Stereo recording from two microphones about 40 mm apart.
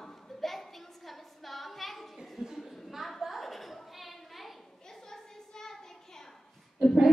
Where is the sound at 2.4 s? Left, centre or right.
Centre.